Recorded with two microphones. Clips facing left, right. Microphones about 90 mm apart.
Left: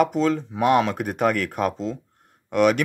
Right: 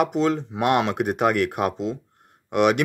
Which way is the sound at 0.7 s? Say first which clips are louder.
Left 1 dB; 55° right (ahead or behind).